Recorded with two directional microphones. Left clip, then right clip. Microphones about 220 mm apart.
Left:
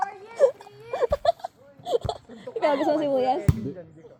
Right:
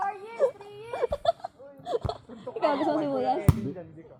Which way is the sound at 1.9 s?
30° left (ahead or behind).